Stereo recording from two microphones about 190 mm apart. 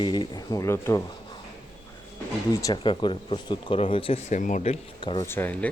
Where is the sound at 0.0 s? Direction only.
25° left (ahead or behind).